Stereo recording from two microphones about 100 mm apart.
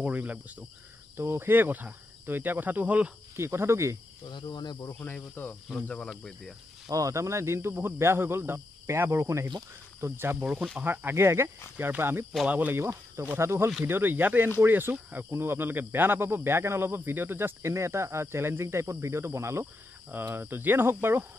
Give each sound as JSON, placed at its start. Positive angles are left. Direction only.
{"t": 0.0, "sound": "speech", "side_deg": -15}
{"t": 3.3, "sound": "speech", "side_deg": -25}
{"t": 4.3, "sound": "speech", "side_deg": 50}
{"t": 5.0, "sound": "speech", "side_deg": 15}
{"t": 6.9, "sound": "speech", "side_deg": -35}